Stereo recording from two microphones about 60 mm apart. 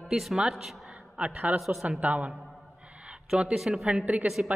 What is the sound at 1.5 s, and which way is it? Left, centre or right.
Speech, centre.